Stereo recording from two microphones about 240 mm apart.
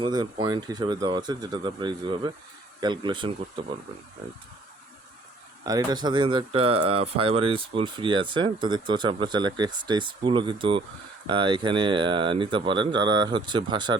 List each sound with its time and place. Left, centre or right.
0.0 s speech: centre
5.6 s speech: centre